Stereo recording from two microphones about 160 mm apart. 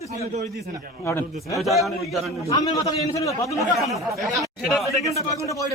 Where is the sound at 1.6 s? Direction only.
Centre (ahead or behind).